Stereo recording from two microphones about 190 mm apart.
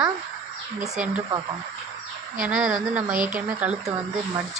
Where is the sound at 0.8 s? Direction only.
5° right (ahead or behind).